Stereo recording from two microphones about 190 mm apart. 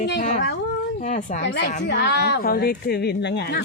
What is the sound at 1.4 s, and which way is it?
A woman's voice, 60° left (ahead or behind).